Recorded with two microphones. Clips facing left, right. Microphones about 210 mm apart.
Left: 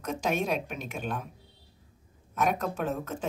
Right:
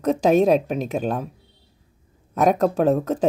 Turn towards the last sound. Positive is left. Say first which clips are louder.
# right 13 dB
turn(degrees=-35)  # may be behind; listen again after turning